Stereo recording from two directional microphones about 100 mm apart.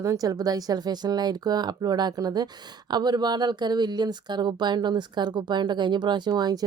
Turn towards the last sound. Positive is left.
turn(degrees=-45)  # may be behind; listen again after turning